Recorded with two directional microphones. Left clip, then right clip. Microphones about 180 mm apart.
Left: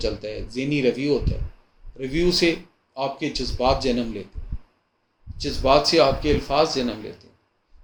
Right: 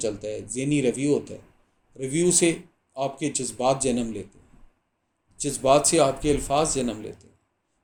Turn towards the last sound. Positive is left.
turn(degrees=-45)  # may be behind; listen again after turning